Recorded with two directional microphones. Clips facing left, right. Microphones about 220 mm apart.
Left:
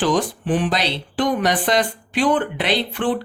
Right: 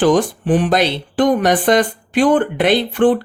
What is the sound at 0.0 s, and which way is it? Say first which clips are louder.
Speech: right 6 dB; 50° right (ahead or behind).